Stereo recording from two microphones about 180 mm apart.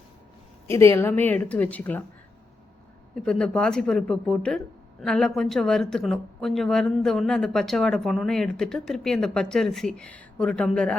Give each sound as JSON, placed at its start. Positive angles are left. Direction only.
{"t": 0.7, "sound": "a woman's voice", "side_deg": 15}
{"t": 3.2, "sound": "speech", "side_deg": 5}